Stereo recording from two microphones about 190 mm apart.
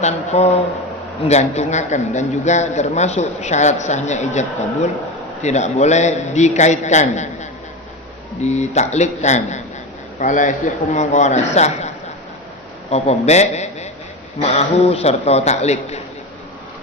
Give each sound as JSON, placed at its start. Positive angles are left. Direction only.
{"t": 0.0, "sound": "a man's voice", "side_deg": 35}
{"t": 8.4, "sound": "a man's voice", "side_deg": 35}
{"t": 12.9, "sound": "a man's voice", "side_deg": 35}